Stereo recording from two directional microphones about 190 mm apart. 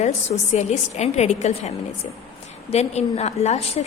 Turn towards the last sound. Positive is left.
turn(degrees=35)  # may be behind; listen again after turning